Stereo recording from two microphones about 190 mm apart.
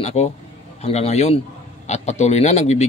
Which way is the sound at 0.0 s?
35° left (ahead or behind).